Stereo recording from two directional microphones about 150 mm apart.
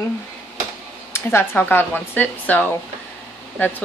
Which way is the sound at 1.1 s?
15° left (ahead or behind).